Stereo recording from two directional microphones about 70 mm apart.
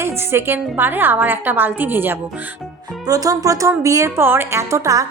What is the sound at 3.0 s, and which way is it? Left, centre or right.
A woman's voice, right.